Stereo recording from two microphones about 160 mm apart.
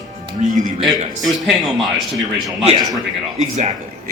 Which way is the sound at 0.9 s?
Centre (ahead or behind).